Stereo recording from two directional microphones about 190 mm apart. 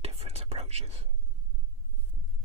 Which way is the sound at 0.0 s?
30° right (ahead or behind).